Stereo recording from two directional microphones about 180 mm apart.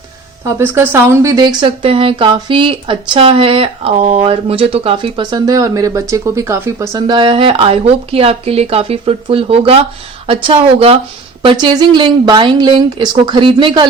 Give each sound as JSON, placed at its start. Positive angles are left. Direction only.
{"t": 0.6, "sound": "speech", "side_deg": -10}